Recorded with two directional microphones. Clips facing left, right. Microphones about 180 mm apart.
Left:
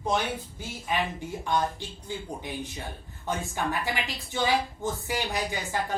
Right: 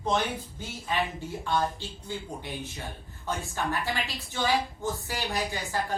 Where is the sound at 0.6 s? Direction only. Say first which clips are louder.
Even; 15° left (ahead or behind).